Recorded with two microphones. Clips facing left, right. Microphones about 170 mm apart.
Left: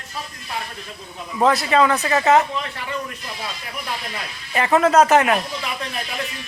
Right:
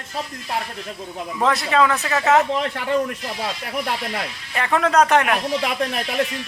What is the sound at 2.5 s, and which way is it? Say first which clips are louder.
Speech: right 6 dB; 50° right (ahead or behind).